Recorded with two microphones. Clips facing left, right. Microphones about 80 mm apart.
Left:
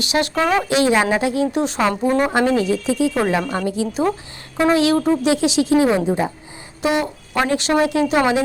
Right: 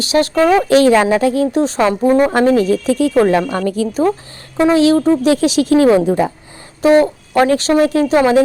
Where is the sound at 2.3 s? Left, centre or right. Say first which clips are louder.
Right 5 dB; right.